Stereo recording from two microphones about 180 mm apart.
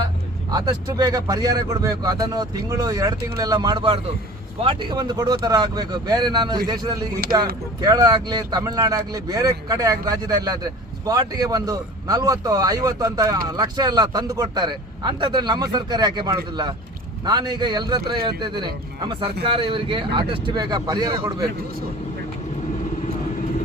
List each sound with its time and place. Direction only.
0.5 s speech: 20° right (ahead or behind)